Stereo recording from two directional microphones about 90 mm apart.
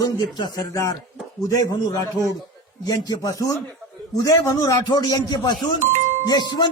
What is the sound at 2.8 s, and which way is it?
Speech, 45° left (ahead or behind).